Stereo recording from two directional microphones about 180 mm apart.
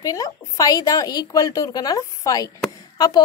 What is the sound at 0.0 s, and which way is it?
A woman's voice, 20° left (ahead or behind).